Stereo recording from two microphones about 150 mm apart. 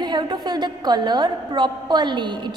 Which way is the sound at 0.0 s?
30° right (ahead or behind).